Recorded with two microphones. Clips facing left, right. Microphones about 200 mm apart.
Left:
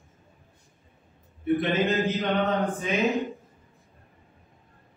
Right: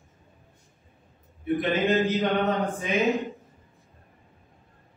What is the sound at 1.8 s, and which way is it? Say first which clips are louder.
Mantra: right 2 dB; centre (ahead or behind).